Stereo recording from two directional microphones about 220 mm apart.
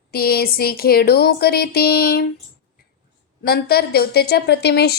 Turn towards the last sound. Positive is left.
turn(degrees=45)  # may be behind; listen again after turning